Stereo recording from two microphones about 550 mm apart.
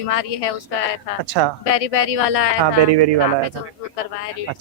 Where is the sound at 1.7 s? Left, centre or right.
Left.